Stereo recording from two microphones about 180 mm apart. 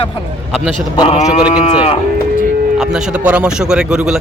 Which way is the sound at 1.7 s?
30° left (ahead or behind).